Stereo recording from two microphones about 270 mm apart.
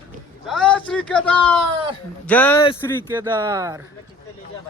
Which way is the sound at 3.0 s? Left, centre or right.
Centre.